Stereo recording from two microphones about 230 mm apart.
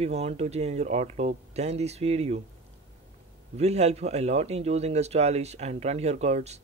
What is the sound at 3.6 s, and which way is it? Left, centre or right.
A man's voice, right.